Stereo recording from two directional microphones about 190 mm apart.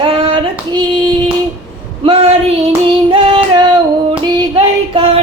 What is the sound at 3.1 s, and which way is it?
Female singing, 25° right (ahead or behind).